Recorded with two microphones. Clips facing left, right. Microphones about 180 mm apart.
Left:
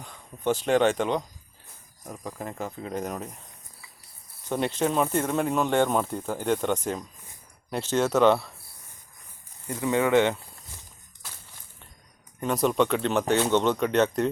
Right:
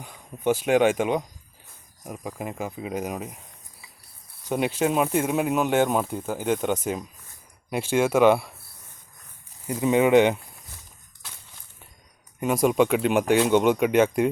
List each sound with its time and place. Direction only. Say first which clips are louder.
0.0 s speech: right 3 dB; 10° right (ahead or behind)
4.4 s speech: right 2 dB; 10° right (ahead or behind)
9.6 s speech: right 4 dB; 15° right (ahead or behind)
12.4 s speech: right 3 dB; 10° right (ahead or behind)